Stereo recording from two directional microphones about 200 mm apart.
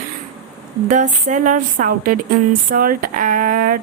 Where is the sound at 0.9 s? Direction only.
40° right (ahead or behind).